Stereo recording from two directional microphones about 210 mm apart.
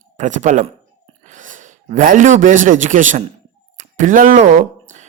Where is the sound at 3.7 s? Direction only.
35° right (ahead or behind).